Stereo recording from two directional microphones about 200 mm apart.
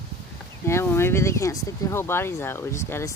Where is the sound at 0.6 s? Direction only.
15° left (ahead or behind).